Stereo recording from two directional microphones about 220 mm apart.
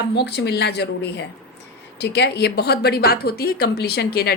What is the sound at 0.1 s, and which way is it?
A woman's voice, 50° left (ahead or behind).